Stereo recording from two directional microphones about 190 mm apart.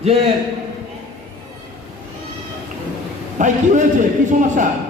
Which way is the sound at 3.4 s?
40° right (ahead or behind).